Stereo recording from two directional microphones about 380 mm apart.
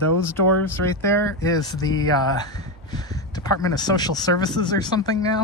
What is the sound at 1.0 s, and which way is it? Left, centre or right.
Speech, centre.